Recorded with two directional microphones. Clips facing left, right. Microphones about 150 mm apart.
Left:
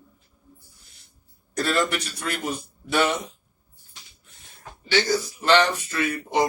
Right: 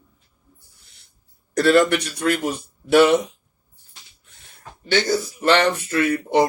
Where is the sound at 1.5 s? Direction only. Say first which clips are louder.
Right 8 dB; 65° right (ahead or behind).